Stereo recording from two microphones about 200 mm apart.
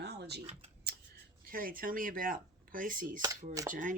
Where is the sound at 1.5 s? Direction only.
45° right (ahead or behind).